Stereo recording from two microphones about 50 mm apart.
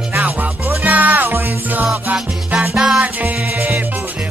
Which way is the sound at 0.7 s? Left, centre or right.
Right.